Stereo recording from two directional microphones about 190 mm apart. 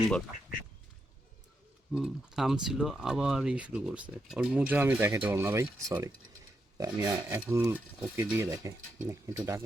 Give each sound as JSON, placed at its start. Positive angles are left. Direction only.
{"t": 1.9, "sound": "speech", "side_deg": 0}